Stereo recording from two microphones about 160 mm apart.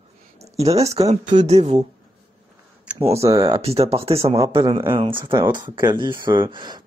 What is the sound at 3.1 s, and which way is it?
Speech, 20° right (ahead or behind).